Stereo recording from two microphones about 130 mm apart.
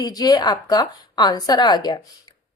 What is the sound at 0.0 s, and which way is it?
A woman's voice, 30° left (ahead or behind).